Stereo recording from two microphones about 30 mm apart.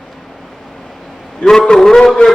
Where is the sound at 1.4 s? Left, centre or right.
Left.